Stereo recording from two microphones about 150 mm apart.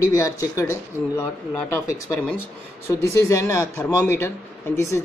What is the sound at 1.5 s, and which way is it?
Speech, 10° left (ahead or behind).